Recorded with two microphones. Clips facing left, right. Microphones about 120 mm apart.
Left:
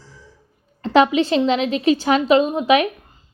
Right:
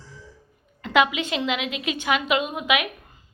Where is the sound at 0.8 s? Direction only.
35° left (ahead or behind).